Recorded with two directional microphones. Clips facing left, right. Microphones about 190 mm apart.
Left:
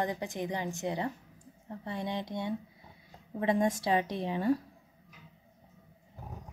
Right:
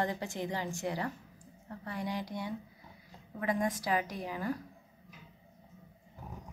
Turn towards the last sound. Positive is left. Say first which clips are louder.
# left 7 dB
turn(degrees=25)  # may be behind; listen again after turning